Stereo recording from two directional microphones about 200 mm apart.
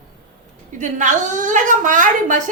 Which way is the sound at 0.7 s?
40° right (ahead or behind).